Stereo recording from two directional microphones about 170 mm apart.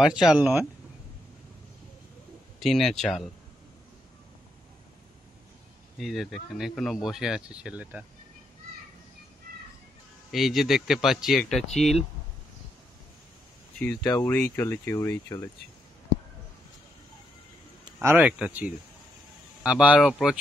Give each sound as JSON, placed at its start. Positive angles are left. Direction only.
{"t": 0.0, "sound": "speech", "side_deg": -5}
{"t": 2.6, "sound": "speech", "side_deg": 0}
{"t": 5.9, "sound": "speech", "side_deg": 0}
{"t": 10.3, "sound": "speech", "side_deg": 0}
{"t": 14.0, "sound": "speech", "side_deg": 20}
{"t": 18.0, "sound": "speech", "side_deg": -10}